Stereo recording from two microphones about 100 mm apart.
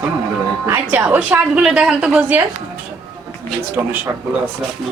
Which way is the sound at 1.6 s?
5° right (ahead or behind).